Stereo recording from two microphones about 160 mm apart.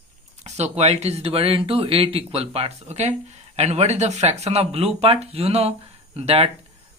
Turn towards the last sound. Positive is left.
turn(degrees=-40)  # may be behind; listen again after turning